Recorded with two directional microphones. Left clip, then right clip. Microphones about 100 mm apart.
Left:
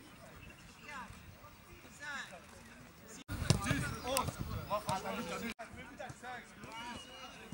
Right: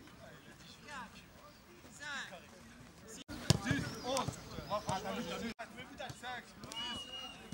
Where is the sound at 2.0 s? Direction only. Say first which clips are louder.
Even; 15° right (ahead or behind).